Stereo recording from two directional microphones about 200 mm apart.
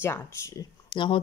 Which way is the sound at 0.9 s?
25° left (ahead or behind).